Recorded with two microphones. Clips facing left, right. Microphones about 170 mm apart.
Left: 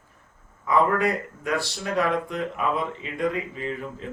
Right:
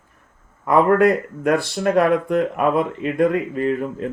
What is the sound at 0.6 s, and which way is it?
Speech, 55° right (ahead or behind).